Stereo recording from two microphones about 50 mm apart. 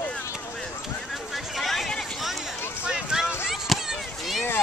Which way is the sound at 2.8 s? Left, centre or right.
Centre.